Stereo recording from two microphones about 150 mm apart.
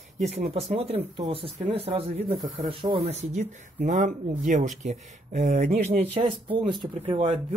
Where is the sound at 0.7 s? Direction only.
40° right (ahead or behind).